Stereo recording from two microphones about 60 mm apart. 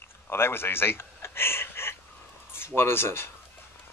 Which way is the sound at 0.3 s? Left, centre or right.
Left.